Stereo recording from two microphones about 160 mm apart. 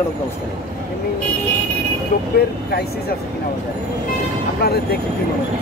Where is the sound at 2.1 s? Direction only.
65° left (ahead or behind).